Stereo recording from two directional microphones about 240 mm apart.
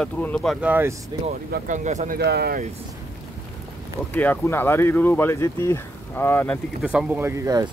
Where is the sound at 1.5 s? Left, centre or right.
Right.